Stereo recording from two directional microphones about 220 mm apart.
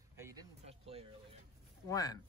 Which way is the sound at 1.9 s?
15° left (ahead or behind).